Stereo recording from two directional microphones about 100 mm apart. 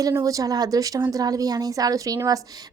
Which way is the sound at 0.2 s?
35° right (ahead or behind).